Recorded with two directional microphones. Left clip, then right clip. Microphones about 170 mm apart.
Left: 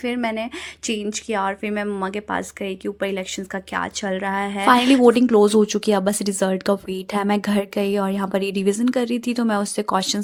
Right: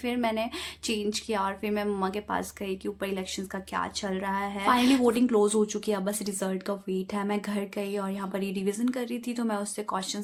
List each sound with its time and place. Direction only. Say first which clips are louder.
0.0 s speech: left 5 dB; 30° left (ahead or behind)
5.0 s speech: left 9 dB; 40° left (ahead or behind)